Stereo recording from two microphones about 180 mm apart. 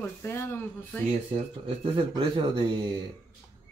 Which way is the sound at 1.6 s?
30° right (ahead or behind).